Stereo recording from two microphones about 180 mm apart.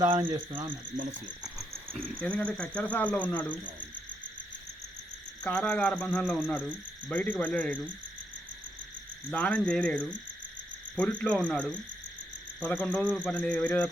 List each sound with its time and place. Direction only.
0.0 s speech: 30° right (ahead or behind)
1.1 s cricket: centre (ahead or behind)
2.2 s speech: 5° left (ahead or behind)
5.4 s cricket: 5° left (ahead or behind)
7.1 s speech: 5° left (ahead or behind)
9.3 s speech: 5° left (ahead or behind)